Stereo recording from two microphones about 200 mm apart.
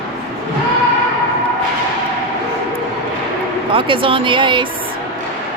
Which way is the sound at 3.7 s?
25° right (ahead or behind).